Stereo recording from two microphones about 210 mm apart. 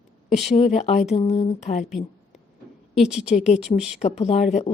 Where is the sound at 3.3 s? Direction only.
30° left (ahead or behind).